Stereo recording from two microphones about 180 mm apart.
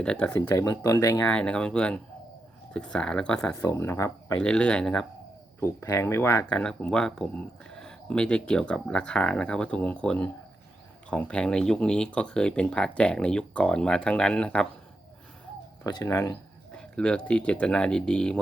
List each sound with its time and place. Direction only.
0.0 s speech: 5° left (ahead or behind)
1.3 s speech: 5° left (ahead or behind)
4.4 s speech: 5° left (ahead or behind)
5.5 s speech: 15° left (ahead or behind)
6.5 s speech: 5° left (ahead or behind)
15.9 s speech: 20° left (ahead or behind)
16.7 s speech: 5° left (ahead or behind)